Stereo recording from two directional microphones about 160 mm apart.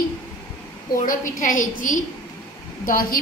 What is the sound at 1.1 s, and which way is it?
A woman's voice, 55° left (ahead or behind).